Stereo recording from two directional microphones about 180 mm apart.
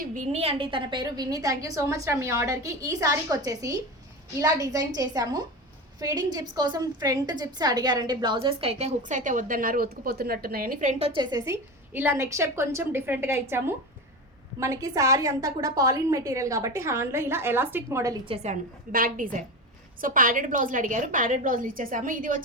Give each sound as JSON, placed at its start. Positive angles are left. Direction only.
{"t": 0.1, "sound": "a woman's voice", "side_deg": -35}
{"t": 11.1, "sound": "a woman's voice", "side_deg": -25}
{"t": 18.3, "sound": "a woman's voice", "side_deg": -40}